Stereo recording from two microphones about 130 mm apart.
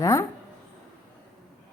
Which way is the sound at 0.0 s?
20° left (ahead or behind).